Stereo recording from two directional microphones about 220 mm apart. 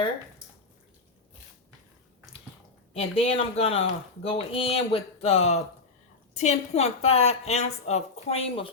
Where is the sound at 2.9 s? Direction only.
25° left (ahead or behind).